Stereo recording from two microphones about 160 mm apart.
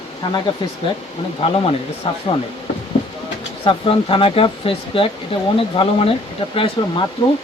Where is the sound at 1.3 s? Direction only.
35° left (ahead or behind).